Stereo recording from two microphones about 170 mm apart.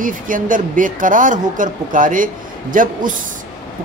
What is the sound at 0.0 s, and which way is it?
Speech, 55° right (ahead or behind).